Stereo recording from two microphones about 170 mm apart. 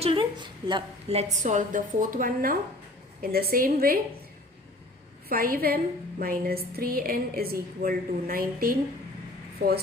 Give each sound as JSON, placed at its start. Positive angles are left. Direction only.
{"t": 0.0, "sound": "a woman's voice", "side_deg": -30}
{"t": 1.4, "sound": "a woman's voice", "side_deg": -45}
{"t": 5.3, "sound": "a woman's voice", "side_deg": -60}